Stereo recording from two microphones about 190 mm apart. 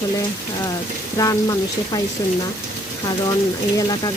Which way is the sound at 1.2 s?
20° left (ahead or behind).